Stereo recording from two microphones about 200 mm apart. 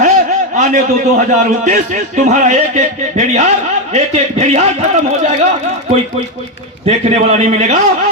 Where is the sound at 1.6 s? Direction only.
40° right (ahead or behind).